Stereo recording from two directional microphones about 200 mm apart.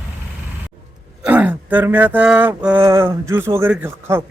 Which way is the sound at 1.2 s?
5° right (ahead or behind).